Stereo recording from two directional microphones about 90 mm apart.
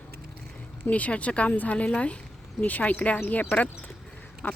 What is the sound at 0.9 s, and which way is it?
Speech, 15° left (ahead or behind).